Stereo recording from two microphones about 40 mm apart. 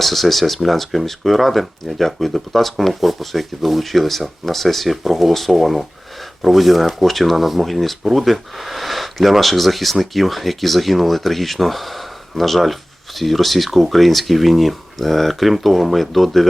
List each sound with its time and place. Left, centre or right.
0.0 s speech: centre